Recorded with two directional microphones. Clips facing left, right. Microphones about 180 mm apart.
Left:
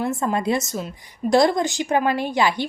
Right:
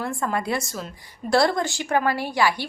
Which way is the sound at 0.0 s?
20° left (ahead or behind).